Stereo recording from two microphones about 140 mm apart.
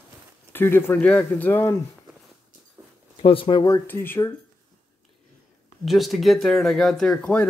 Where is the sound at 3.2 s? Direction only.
40° left (ahead or behind).